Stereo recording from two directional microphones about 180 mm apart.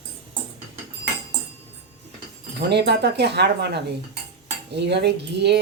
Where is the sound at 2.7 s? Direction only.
70° right (ahead or behind).